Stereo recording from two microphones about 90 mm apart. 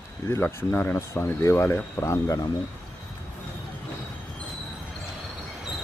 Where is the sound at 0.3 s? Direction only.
25° left (ahead or behind).